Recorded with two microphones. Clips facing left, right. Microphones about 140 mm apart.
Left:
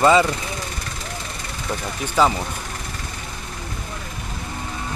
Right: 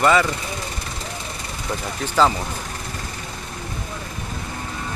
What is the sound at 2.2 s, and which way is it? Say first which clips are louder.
Speech: even; 10° left (ahead or behind).